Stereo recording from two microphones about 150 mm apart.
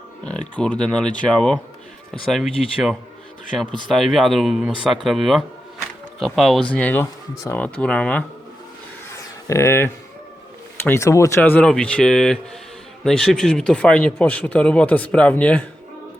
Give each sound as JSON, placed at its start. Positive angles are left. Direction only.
{"t": 0.3, "sound": "speech", "side_deg": 5}
{"t": 9.5, "sound": "speech", "side_deg": 20}